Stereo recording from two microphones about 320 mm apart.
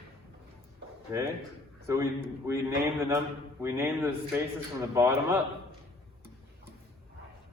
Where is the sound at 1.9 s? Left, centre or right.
Centre.